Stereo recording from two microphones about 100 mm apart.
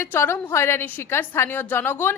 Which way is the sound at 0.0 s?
25° left (ahead or behind).